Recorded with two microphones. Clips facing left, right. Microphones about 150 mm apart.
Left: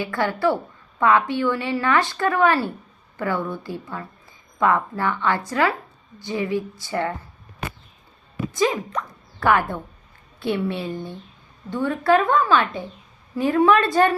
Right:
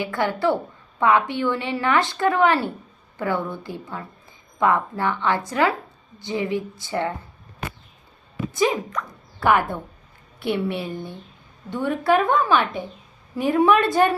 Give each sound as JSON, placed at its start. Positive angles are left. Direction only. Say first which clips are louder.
{"t": 0.0, "sound": "a woman's voice", "louder": "even", "side_deg": -15}
{"t": 8.5, "sound": "a woman's voice", "louder": "even", "side_deg": -20}